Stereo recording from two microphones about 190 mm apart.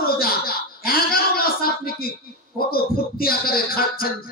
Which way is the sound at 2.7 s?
50° left (ahead or behind).